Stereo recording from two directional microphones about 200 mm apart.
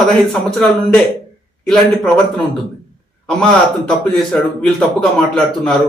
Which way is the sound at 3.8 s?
5° left (ahead or behind).